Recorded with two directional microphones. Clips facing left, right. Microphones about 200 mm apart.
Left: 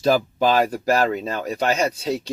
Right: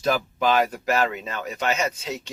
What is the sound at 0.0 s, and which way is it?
Speech, 35° left (ahead or behind).